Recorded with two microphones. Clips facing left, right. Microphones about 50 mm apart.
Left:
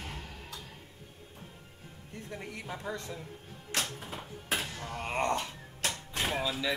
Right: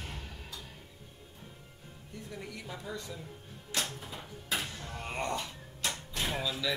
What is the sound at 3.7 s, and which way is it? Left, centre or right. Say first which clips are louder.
Music: left 1 dB; left.